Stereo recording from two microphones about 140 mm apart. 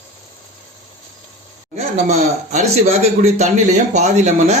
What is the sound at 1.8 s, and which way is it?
Speech, 50° right (ahead or behind).